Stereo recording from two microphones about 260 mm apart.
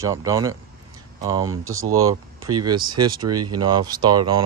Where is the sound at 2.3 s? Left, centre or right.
Right.